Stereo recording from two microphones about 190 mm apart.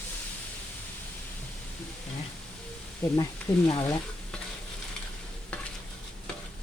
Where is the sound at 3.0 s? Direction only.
10° left (ahead or behind).